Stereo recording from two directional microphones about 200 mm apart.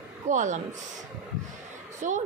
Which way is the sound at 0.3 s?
35° right (ahead or behind).